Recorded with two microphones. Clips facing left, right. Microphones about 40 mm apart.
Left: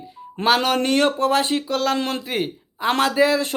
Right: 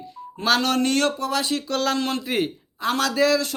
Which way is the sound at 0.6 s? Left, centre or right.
Left.